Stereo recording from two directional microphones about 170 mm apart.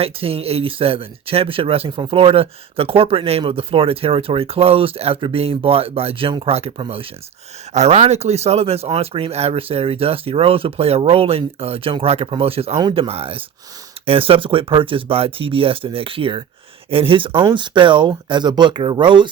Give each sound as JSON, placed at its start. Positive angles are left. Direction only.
{"t": 0.0, "sound": "speech", "side_deg": -35}